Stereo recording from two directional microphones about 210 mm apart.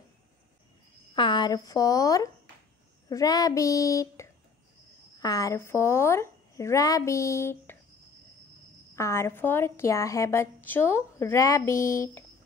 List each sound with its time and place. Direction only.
1.1 s a woman's voice: 20° left (ahead or behind)
8.9 s a woman's voice: 15° left (ahead or behind)